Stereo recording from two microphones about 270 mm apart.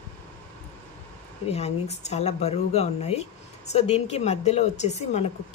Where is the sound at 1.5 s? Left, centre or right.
Left.